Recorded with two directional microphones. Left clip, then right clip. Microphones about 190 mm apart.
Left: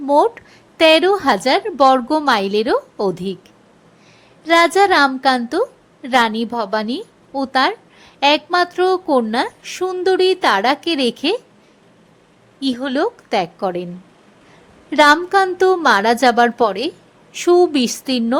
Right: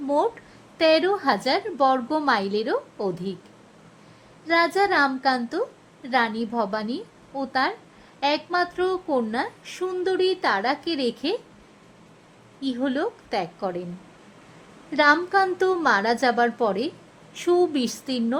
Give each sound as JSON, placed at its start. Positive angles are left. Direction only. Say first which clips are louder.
{"t": 0.1, "sound": "a woman's voice", "louder": "left 9 dB", "side_deg": 25}
{"t": 4.4, "sound": "a woman's voice", "louder": "left 8 dB", "side_deg": 20}
{"t": 12.5, "sound": "a woman's voice", "louder": "left 7 dB", "side_deg": 20}
{"t": 14.8, "sound": "a woman's voice", "louder": "left 7 dB", "side_deg": 20}